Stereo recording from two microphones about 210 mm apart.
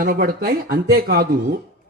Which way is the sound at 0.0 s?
45° right (ahead or behind).